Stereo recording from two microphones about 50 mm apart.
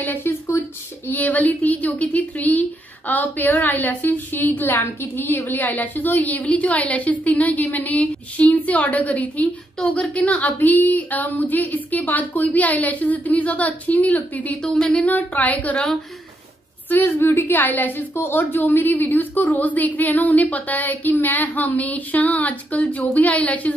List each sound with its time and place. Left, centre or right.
0.0 s speech: left
1.2 s a woman's voice: left
14.6 s speech: centre
14.9 s a woman's voice: left
16.9 s a woman's voice: left